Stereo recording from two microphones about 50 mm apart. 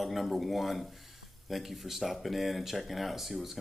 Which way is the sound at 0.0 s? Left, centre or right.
Centre.